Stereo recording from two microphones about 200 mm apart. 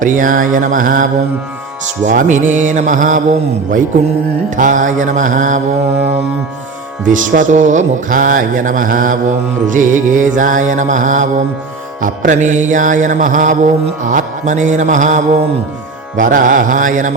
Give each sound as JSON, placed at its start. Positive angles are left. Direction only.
{"t": 0.0, "sound": "music", "side_deg": -40}
{"t": 2.0, "sound": "music", "side_deg": -40}
{"t": 4.5, "sound": "music", "side_deg": -40}
{"t": 7.0, "sound": "music", "side_deg": -40}